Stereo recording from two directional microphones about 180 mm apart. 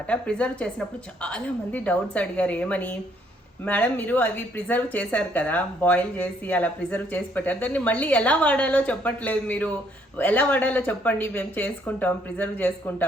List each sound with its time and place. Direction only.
0.1 s speech: 5° left (ahead or behind)